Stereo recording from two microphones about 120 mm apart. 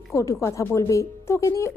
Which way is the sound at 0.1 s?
25° left (ahead or behind).